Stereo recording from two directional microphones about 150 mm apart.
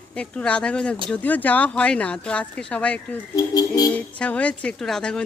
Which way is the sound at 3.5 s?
25° left (ahead or behind).